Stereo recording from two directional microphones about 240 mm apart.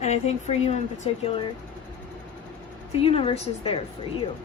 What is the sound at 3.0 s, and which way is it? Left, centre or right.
Speech, left.